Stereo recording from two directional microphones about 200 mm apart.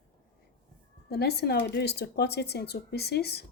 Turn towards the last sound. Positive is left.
turn(degrees=55)  # may be behind; listen again after turning